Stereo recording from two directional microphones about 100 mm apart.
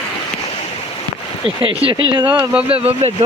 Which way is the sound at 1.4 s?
65° right (ahead or behind).